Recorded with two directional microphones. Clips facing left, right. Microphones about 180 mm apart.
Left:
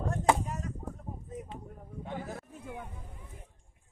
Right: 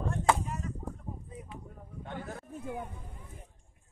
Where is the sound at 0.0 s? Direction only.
40° left (ahead or behind).